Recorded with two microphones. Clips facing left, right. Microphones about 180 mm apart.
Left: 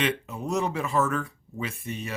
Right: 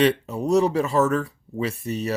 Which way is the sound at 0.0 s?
35° right (ahead or behind).